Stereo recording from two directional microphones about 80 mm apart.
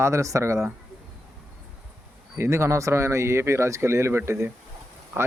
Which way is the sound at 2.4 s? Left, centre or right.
Right.